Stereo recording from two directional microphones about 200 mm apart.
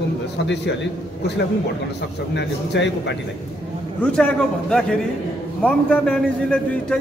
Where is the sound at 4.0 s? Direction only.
5° left (ahead or behind).